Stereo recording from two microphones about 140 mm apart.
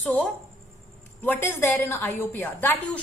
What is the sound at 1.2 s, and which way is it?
A woman's voice, 15° left (ahead or behind).